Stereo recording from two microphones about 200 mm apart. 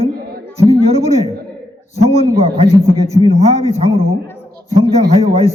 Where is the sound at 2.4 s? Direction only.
30° right (ahead or behind).